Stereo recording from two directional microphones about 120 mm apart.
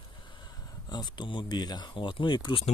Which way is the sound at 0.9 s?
35° left (ahead or behind).